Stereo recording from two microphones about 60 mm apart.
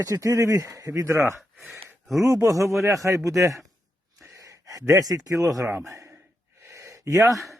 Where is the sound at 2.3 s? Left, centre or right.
Right.